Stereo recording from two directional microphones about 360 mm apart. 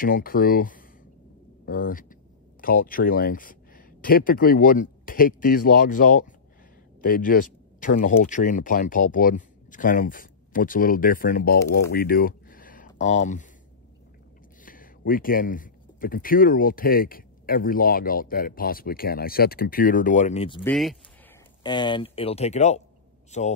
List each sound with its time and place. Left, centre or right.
0.0 s speech: left
11.9 s a sound: left
14.6 s speech: left
20.7 s speech: centre
21.6 s speech: centre